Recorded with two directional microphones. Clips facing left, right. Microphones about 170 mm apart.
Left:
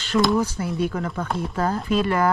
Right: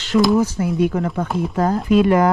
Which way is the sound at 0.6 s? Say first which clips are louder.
Right 6 dB; 15° right (ahead or behind).